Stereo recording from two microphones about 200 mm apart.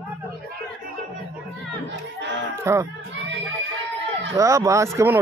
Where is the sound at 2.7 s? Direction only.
15° right (ahead or behind).